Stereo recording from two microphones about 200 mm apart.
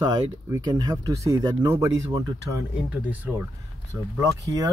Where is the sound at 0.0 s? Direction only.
20° right (ahead or behind).